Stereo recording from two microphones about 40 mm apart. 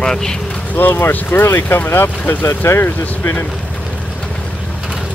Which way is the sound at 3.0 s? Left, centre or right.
Left.